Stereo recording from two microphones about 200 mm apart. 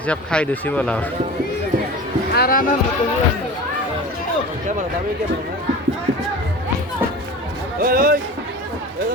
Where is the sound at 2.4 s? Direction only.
45° left (ahead or behind).